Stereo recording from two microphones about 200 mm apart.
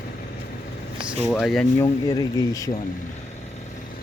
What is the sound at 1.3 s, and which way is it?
Speech, centre (ahead or behind).